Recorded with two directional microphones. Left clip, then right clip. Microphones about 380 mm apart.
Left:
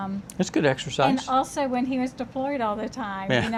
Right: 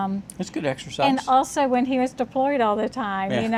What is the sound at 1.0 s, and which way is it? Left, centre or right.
Speech, right.